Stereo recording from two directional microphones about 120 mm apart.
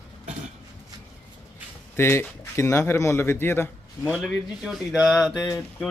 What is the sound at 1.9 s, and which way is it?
Speech, 20° left (ahead or behind).